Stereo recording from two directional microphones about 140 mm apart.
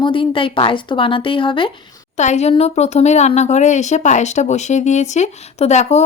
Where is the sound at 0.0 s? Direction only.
40° left (ahead or behind).